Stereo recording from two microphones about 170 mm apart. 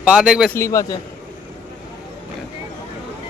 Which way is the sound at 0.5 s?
15° left (ahead or behind).